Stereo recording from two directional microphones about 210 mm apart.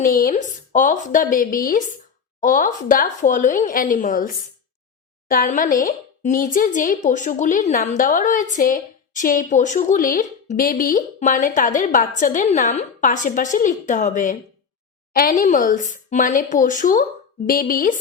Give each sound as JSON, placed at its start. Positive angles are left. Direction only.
{"t": 0.3, "sound": "a woman's voice", "side_deg": 40}
{"t": 5.3, "sound": "a woman's voice", "side_deg": 40}